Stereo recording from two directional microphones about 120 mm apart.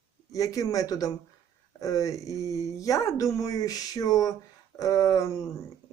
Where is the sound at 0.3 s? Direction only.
30° left (ahead or behind).